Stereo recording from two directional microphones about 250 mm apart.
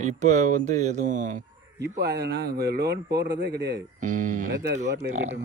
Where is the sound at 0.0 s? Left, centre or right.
Right.